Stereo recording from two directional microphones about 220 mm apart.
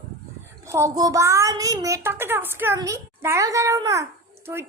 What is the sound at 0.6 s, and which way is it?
A child's voice, 15° right (ahead or behind).